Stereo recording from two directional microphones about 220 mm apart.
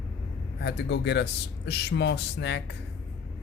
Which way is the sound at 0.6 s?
50° left (ahead or behind).